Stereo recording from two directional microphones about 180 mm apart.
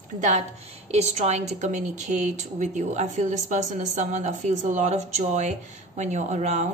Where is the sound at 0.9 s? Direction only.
40° right (ahead or behind).